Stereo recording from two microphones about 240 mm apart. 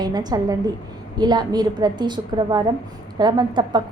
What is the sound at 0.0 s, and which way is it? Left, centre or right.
A woman's voice, centre.